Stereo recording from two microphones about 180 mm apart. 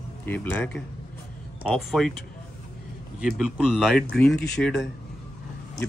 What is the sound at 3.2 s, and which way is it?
Speech, 5° right (ahead or behind).